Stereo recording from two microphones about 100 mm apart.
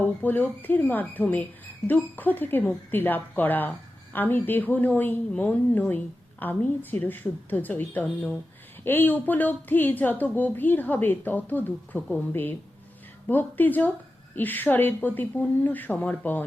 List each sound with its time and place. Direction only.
0.0 s speech: 15° left (ahead or behind)